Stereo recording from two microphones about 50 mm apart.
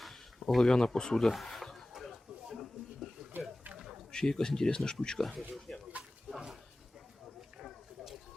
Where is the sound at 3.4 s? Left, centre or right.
Right.